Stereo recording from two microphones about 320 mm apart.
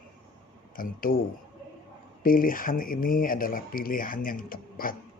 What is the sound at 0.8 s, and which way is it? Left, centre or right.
Speech, left.